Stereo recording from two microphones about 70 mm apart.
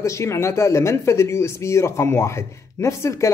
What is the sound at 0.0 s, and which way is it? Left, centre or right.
Speech, left.